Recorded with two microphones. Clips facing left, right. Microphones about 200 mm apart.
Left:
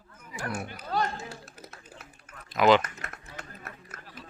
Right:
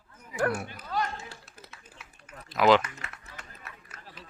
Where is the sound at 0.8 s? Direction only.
45° left (ahead or behind).